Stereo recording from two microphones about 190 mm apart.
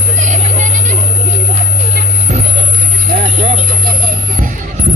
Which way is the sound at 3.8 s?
50° right (ahead or behind).